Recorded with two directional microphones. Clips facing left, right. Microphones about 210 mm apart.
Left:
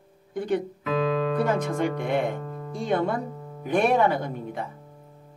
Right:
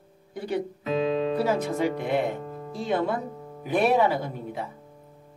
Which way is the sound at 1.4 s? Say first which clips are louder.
Even; 5° right (ahead or behind).